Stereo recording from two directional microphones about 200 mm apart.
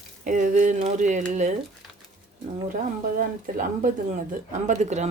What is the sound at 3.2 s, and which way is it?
Speech, 40° right (ahead or behind).